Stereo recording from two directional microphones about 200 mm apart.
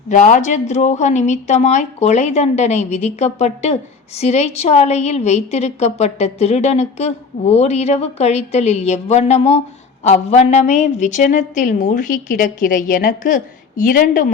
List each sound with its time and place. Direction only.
0.1 s a woman's voice: 40° left (ahead or behind)